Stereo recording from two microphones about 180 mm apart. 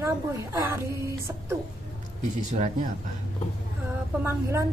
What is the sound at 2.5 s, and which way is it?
Speech, 40° right (ahead or behind).